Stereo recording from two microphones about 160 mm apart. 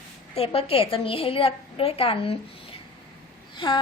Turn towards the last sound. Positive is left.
turn(degrees=30)  # may be behind; listen again after turning